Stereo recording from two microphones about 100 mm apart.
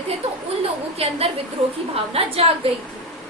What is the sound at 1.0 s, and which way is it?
A woman's voice, 80° right.